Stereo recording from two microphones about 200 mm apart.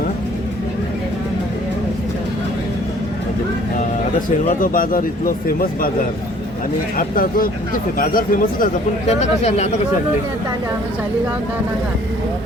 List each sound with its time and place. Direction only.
4.4 s speech: 45° left (ahead or behind)
6.9 s speech: 45° left (ahead or behind)